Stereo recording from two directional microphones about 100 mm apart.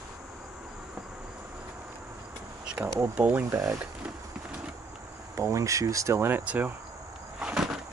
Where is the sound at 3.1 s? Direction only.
15° right (ahead or behind).